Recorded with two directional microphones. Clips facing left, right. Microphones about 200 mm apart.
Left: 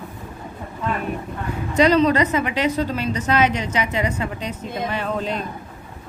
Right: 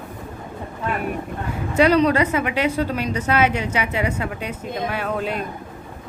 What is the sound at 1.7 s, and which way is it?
A woman's voice, 10° right (ahead or behind).